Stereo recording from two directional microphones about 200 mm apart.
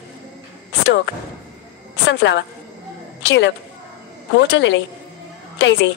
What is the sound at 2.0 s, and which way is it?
A woman's voice, 65° left (ahead or behind).